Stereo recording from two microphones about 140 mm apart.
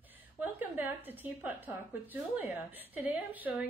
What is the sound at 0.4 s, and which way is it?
A woman's voice, 15° right (ahead or behind).